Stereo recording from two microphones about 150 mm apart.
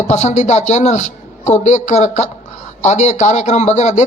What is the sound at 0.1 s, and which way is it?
A man's voice, 50° left (ahead or behind).